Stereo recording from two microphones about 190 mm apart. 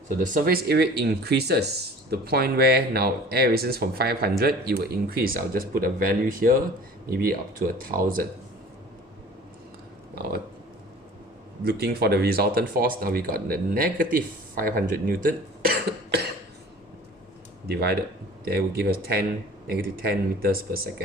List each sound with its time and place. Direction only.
0.2 s speech: 45° right (ahead or behind)
11.6 s speech: 50° right (ahead or behind)
17.7 s speech: 55° right (ahead or behind)